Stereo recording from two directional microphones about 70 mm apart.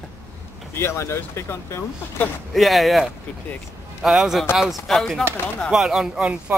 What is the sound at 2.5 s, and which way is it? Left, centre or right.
Speech, centre.